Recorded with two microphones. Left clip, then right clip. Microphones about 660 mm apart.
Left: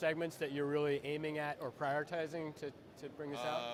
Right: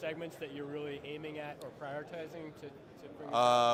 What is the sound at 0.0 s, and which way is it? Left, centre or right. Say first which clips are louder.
Speech: left 4 dB; left.